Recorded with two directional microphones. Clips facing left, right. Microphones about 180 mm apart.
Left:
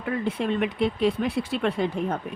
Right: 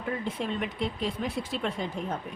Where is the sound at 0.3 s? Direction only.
65° left (ahead or behind).